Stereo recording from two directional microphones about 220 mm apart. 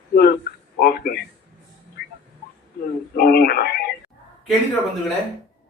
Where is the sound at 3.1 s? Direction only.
45° left (ahead or behind).